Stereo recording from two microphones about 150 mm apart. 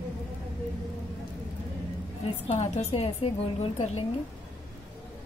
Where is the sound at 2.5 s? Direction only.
50° left (ahead or behind).